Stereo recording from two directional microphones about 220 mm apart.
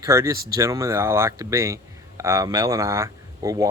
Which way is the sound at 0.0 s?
15° right (ahead or behind).